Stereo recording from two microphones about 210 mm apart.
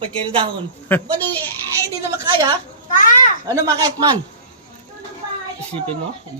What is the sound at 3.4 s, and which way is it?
Speech, 15° right (ahead or behind).